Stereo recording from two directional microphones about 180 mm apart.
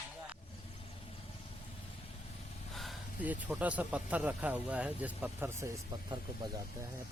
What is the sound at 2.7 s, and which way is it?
Speech, centre (ahead or behind).